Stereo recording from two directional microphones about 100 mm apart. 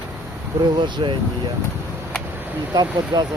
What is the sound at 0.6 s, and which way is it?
Speech, 50° right (ahead or behind).